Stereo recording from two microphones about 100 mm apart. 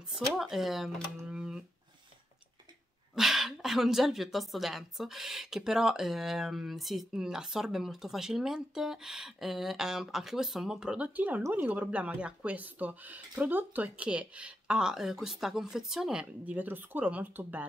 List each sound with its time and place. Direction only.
0.1 s speech: centre (ahead or behind)
1.2 s a sound: 10° right (ahead or behind)
3.2 s speech: centre (ahead or behind); by 17.6 s 20° right (ahead or behind)